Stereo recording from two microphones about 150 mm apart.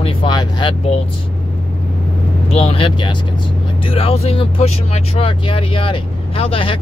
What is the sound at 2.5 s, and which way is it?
Speech, 40° left (ahead or behind).